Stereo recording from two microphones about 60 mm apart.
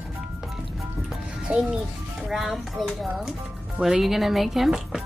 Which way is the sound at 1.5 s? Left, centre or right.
Centre.